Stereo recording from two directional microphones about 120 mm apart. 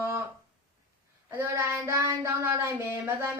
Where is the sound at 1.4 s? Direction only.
20° right (ahead or behind).